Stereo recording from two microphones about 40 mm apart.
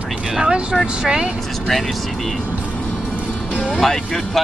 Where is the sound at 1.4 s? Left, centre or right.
Centre.